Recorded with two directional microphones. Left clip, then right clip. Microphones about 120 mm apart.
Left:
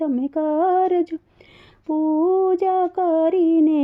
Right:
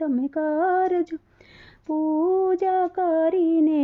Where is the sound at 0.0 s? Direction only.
35° left (ahead or behind).